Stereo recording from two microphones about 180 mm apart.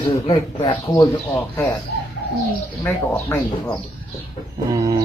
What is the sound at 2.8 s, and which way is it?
Speech, 10° left (ahead or behind).